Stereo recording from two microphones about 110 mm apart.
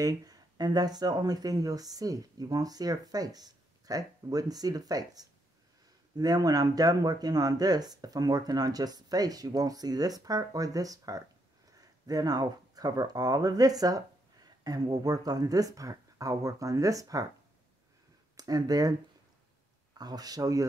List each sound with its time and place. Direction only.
0.0 s speech: 35° right (ahead or behind)
18.3 s speech: 35° right (ahead or behind)